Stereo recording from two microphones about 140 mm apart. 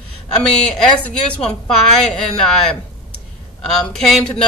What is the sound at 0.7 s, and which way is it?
Speech, 5° left (ahead or behind).